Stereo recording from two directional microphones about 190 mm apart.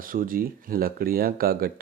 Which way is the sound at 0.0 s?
45° right (ahead or behind).